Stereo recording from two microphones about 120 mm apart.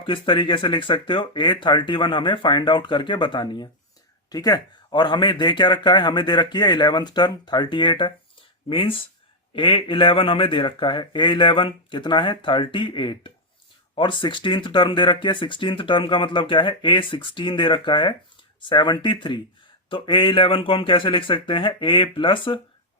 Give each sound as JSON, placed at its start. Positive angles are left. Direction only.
{"t": 0.0, "sound": "a man's voice", "side_deg": 45}